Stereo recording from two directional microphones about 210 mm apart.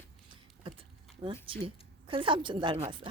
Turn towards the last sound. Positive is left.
turn(degrees=-25)  # may be behind; listen again after turning